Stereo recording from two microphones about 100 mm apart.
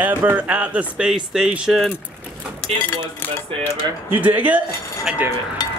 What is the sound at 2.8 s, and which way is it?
Cutlery, 20° left (ahead or behind).